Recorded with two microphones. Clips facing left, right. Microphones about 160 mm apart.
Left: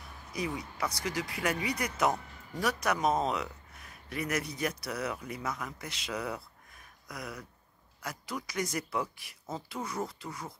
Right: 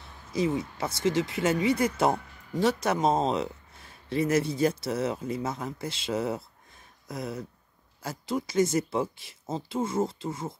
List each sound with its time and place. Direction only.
0.0 s speech: 25° right (ahead or behind)